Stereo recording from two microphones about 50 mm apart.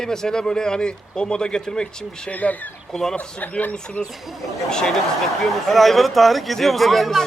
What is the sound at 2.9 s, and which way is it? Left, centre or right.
Speech, centre.